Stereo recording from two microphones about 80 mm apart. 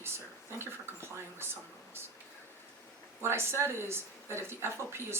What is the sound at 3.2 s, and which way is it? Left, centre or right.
Speech, right.